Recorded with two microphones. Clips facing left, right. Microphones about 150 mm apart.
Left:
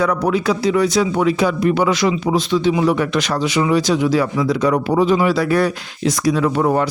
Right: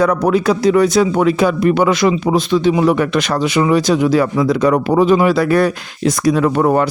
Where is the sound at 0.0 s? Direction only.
45° right (ahead or behind).